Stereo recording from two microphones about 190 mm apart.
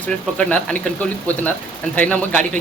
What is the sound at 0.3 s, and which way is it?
Speech, 5° left (ahead or behind).